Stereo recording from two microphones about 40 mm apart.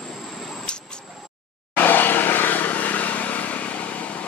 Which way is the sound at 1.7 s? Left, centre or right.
Left.